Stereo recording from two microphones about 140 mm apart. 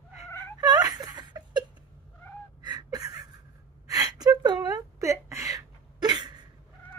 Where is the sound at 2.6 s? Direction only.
30° right (ahead or behind).